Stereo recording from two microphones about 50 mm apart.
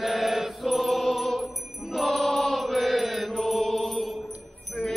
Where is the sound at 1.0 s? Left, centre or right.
Centre.